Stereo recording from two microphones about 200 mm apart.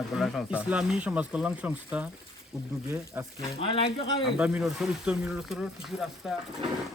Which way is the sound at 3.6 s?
25° left (ahead or behind).